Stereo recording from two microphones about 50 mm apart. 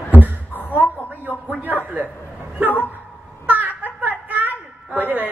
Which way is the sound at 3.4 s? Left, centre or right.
Right.